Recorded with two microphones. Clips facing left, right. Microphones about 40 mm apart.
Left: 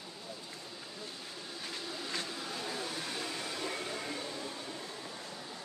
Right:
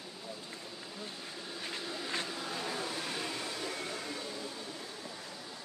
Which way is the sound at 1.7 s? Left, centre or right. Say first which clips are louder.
Right 2 dB; right.